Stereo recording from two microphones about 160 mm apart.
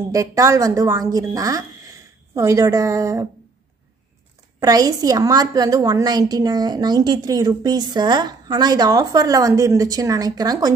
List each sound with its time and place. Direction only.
0.1 s a woman's voice: 20° right (ahead or behind)
4.6 s a woman's voice: 25° right (ahead or behind)